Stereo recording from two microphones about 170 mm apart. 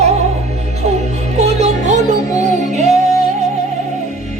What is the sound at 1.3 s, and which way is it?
Music, 40° right (ahead or behind).